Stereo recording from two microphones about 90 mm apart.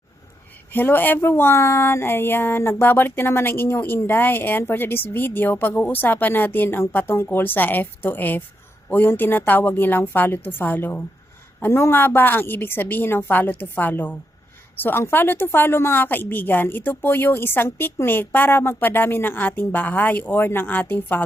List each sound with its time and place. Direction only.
0.7 s speech: 20° left (ahead or behind)